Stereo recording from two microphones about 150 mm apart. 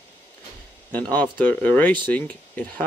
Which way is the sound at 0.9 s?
10° left (ahead or behind).